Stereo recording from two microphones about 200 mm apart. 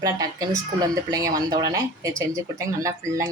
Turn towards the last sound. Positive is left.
turn(degrees=-15)  # may be behind; listen again after turning